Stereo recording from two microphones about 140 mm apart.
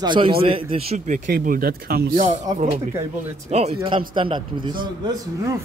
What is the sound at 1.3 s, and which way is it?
Speech, 90° right.